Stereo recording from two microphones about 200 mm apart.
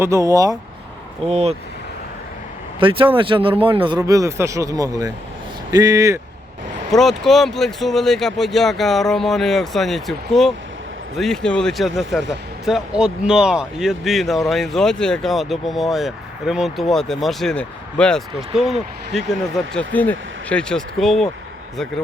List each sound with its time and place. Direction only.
0.0 s speech: 15° right (ahead or behind)
1.3 s speech: 30° right (ahead or behind)
2.8 s speech: 25° right (ahead or behind)
6.9 s speech: centre (ahead or behind)
19.5 s speech: 5° left (ahead or behind)